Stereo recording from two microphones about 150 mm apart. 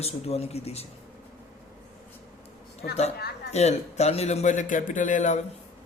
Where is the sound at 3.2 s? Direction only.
90° left.